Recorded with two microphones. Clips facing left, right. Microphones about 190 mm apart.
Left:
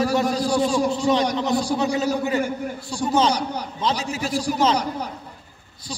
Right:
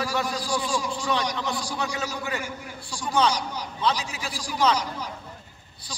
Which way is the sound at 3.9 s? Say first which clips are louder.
Left 3 dB; 40° left (ahead or behind).